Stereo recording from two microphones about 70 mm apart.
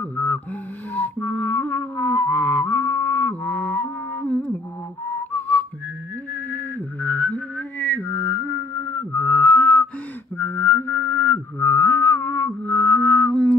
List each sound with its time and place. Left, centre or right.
0.0 s music: left
5.3 s whistling: left
6.5 s a sound: left
7.9 s mantra: left
8.8 s music: left
10.3 s music: left